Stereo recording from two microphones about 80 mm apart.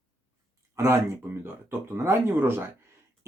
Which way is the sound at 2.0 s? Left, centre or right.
Right.